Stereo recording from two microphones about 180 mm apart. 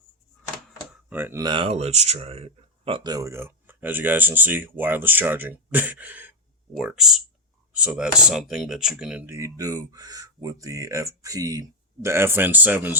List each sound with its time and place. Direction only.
1.1 s speech: 15° right (ahead or behind)